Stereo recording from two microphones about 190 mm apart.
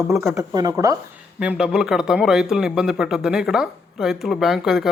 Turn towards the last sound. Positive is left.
turn(degrees=0)  # may be behind; listen again after turning